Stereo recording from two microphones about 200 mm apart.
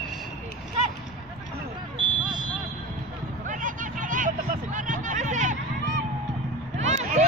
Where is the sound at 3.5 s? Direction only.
40° right (ahead or behind).